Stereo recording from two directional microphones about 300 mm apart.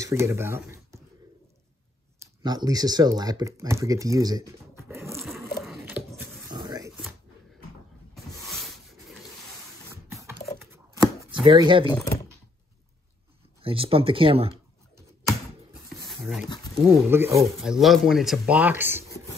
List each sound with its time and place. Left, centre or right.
0.0 s speech: centre
2.1 s speech: centre
5.6 s a sound: centre
8.1 s a sound: centre
10.0 s a sound: centre
11.4 s speech: centre
13.6 s speech: centre
16.1 s dog: centre
16.9 s speech: centre